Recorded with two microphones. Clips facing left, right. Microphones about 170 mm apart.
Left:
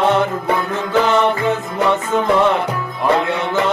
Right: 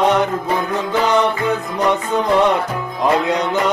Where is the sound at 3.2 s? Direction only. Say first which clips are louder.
Right 1 dB; 20° right (ahead or behind).